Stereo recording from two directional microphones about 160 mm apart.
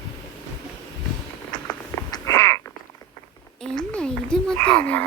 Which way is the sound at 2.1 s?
20° left (ahead or behind).